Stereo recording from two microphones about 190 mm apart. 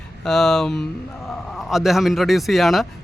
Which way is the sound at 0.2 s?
5° left (ahead or behind).